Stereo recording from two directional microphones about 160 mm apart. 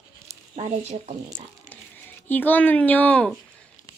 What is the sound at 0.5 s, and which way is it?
Speech, 45° right (ahead or behind).